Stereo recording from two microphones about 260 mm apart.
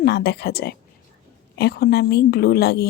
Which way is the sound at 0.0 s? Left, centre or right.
Left.